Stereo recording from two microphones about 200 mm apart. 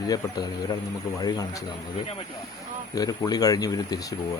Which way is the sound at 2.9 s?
20° left (ahead or behind).